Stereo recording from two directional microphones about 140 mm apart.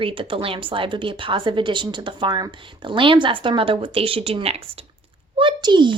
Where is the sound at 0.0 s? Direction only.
40° right (ahead or behind).